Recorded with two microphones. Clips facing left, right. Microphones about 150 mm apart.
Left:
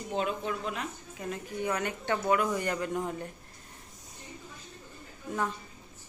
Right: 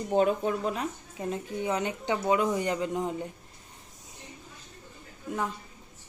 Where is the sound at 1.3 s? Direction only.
20° right (ahead or behind).